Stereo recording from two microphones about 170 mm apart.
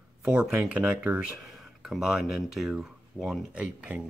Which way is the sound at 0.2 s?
5° right (ahead or behind).